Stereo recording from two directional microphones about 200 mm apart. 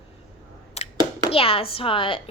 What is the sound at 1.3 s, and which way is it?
Speech, 30° left (ahead or behind).